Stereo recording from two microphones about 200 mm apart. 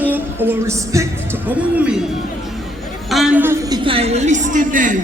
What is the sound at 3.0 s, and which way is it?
A woman's voice, centre (ahead or behind).